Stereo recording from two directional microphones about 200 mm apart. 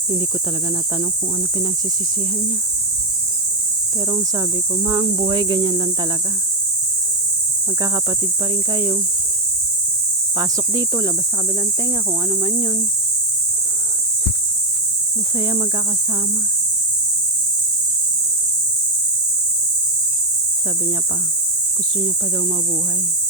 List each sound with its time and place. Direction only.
4.9 s speech: 25° right (ahead or behind)
8.7 s speech: 25° right (ahead or behind)
10.3 s speech: 20° right (ahead or behind)
15.4 s speech: 20° right (ahead or behind)